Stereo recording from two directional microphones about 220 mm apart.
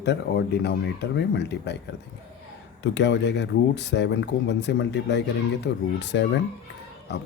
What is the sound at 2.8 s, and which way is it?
Speech, 55° left (ahead or behind).